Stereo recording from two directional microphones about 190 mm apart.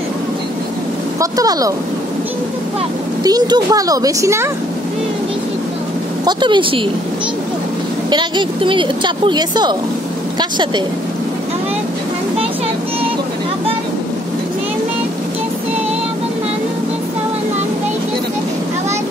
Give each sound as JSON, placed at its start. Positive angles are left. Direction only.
{"t": 1.2, "sound": "a woman's voice", "side_deg": -20}
{"t": 3.3, "sound": "a woman's voice", "side_deg": -20}
{"t": 6.2, "sound": "a woman's voice", "side_deg": -25}
{"t": 8.1, "sound": "a woman's voice", "side_deg": -25}